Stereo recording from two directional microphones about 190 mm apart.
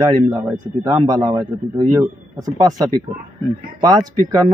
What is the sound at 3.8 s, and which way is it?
Speech, 20° right (ahead or behind).